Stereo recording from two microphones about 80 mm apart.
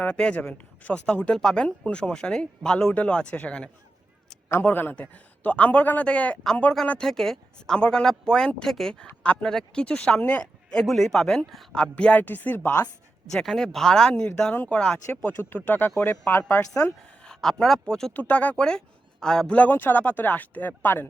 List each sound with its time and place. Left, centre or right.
0.0 s speech: centre
4.6 s speech: left
12.2 s speech: left
13.3 s speech: centre
14.5 s speech: left
16.7 s speech: centre
18.1 s speech: centre
19.5 s speech: left